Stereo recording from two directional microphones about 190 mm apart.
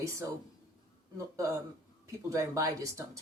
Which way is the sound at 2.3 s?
15° right (ahead or behind).